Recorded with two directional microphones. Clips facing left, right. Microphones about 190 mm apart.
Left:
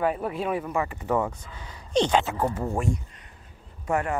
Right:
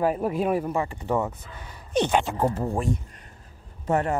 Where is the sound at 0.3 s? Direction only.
40° right (ahead or behind).